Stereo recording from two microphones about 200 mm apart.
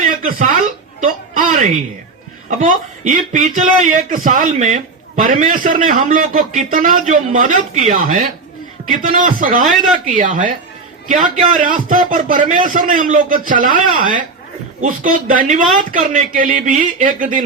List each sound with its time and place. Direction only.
0.0 s a sound: 40° right (ahead or behind)
1.0 s a woman's voice: 40° right (ahead or behind)
11.5 s speech: 40° right (ahead or behind)